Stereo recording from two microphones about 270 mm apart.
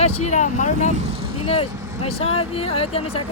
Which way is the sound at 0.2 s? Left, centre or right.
Left.